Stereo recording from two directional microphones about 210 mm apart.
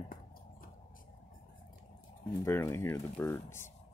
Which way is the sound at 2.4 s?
15° left (ahead or behind).